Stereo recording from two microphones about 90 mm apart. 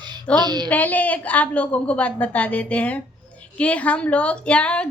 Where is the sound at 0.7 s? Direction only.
20° left (ahead or behind).